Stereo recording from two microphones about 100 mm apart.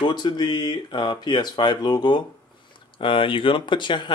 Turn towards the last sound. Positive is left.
turn(degrees=50)  # may be behind; listen again after turning